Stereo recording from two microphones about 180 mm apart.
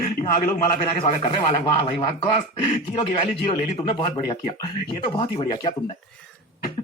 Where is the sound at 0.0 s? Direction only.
40° left (ahead or behind).